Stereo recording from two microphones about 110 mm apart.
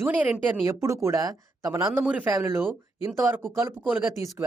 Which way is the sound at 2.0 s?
15° right (ahead or behind).